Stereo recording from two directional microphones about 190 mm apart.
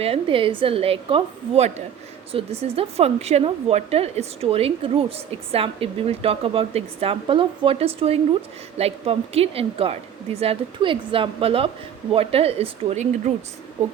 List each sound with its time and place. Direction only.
0.0 s a woman's voice: 30° right (ahead or behind)